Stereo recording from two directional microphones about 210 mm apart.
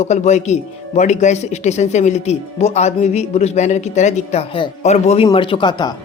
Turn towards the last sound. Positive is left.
turn(degrees=20)  # may be behind; listen again after turning